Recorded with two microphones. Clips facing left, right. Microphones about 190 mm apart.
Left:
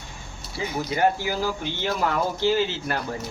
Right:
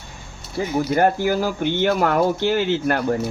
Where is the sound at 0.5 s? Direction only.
50° right (ahead or behind).